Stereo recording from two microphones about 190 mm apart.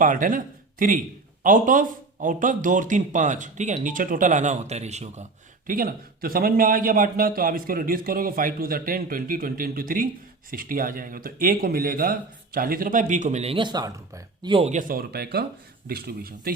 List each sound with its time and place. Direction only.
0.0 s speech: 45° right (ahead or behind)
5.6 s speech: 50° right (ahead or behind)